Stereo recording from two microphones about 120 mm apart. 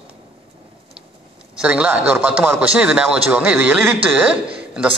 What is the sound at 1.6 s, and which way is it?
A man's voice, 10° right (ahead or behind).